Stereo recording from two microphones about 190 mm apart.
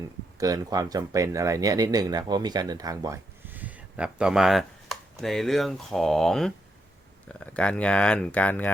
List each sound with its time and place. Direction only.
0.3 s speech: 20° right (ahead or behind); by 8.7 s 10° left (ahead or behind)